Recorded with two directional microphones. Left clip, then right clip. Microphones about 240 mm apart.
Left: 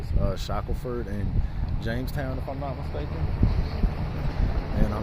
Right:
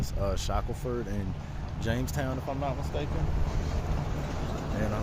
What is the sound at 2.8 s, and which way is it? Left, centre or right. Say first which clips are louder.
Speech: even; right.